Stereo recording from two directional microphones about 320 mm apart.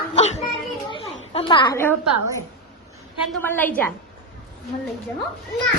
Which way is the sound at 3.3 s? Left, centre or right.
Centre.